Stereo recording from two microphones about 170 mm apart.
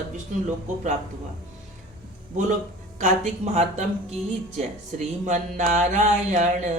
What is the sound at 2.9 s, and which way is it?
A woman's voice, 45° right (ahead or behind).